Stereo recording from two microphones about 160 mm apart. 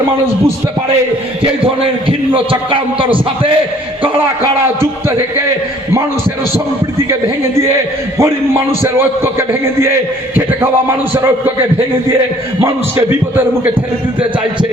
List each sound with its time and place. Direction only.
1.4 s a man's voice: 35° right (ahead or behind)
8.2 s a man's voice: 15° right (ahead or behind)
12.6 s a man's voice: 15° right (ahead or behind)